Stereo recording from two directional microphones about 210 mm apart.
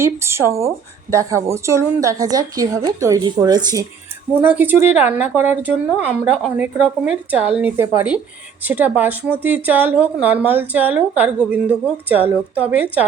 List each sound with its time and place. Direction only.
0.0 s a woman's voice: 10° right (ahead or behind)